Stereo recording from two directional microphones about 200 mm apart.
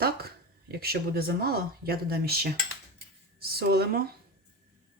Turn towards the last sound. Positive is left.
turn(degrees=-50)  # may be behind; listen again after turning